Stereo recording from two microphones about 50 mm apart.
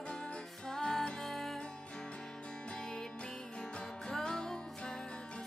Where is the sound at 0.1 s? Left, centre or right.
Centre.